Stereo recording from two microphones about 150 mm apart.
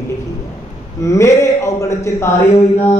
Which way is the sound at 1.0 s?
20° left (ahead or behind).